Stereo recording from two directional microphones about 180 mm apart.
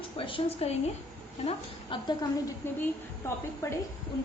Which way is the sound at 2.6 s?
15° left (ahead or behind).